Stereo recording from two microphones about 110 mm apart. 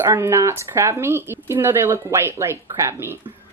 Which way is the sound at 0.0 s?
25° right (ahead or behind).